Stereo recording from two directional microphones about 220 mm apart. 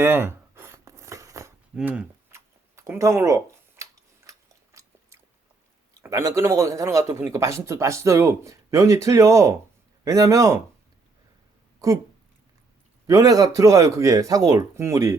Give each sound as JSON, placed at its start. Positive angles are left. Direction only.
{"t": 0.0, "sound": "a sound", "side_deg": -10}
{"t": 6.0, "sound": "speech", "side_deg": -15}
{"t": 11.8, "sound": "speech", "side_deg": -15}
{"t": 13.1, "sound": "speech", "side_deg": -15}